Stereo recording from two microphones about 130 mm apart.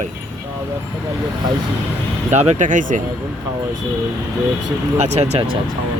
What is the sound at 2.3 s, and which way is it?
Speech, 60° right (ahead or behind).